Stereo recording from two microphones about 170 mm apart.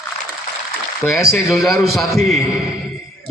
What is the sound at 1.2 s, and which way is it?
A man's voice, centre (ahead or behind).